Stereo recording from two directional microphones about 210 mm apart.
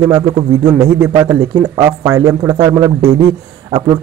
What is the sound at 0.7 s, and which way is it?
Speech, 10° right (ahead or behind).